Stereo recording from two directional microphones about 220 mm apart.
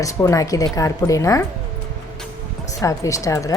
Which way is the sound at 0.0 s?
15° left (ahead or behind).